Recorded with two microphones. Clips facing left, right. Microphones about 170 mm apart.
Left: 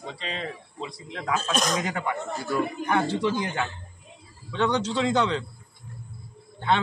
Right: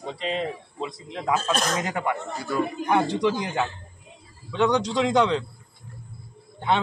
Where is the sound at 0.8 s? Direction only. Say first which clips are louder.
Right 4 dB; 20° right (ahead or behind).